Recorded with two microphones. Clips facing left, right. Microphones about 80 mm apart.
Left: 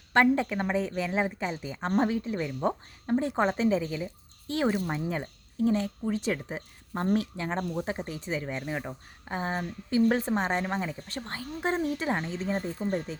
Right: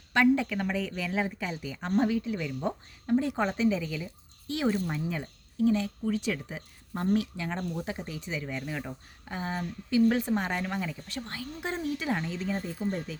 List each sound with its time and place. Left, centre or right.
0.1 s a woman's voice: left
9.3 s a woman's voice: left